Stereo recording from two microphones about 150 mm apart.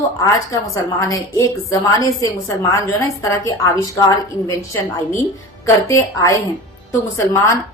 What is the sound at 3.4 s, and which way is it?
A woman's voice, 25° left (ahead or behind).